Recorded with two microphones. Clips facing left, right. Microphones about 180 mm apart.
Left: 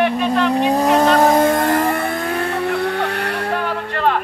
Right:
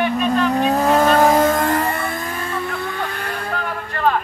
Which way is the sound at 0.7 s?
20° left (ahead or behind).